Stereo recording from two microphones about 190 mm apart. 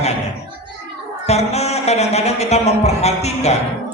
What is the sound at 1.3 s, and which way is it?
A man's voice, 35° left (ahead or behind).